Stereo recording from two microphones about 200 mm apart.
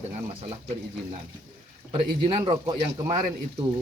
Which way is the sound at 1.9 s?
30° right (ahead or behind).